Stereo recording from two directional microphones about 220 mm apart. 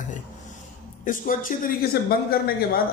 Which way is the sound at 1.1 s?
40° left (ahead or behind).